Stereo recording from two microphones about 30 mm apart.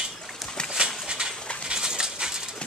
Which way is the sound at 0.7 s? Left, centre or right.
Right.